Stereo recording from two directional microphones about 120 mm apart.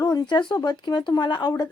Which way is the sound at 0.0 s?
35° left (ahead or behind).